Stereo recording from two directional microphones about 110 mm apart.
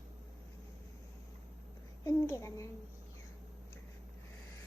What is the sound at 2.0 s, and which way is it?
Speech, 25° left (ahead or behind).